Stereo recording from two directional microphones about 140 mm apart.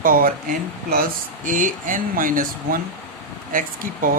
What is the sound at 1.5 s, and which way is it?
Speech, 70° right (ahead or behind).